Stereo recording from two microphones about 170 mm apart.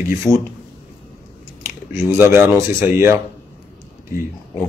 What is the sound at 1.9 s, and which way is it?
Speech, 15° right (ahead or behind).